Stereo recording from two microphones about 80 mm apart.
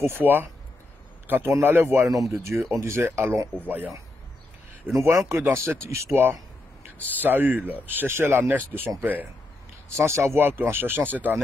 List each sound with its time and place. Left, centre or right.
0.0 s speech: right
1.2 s a sound: right
1.5 s speech: right
2.0 s speech: right
4.9 s speech: right
9.8 s speech: right